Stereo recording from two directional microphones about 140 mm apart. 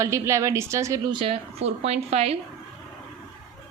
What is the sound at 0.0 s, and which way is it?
Speech, 20° right (ahead or behind).